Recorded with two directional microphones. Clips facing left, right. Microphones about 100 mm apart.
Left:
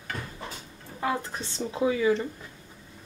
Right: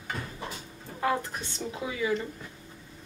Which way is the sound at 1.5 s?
30° left (ahead or behind).